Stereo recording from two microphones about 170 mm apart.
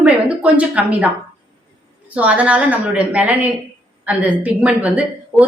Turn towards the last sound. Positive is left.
turn(degrees=-10)  # may be behind; listen again after turning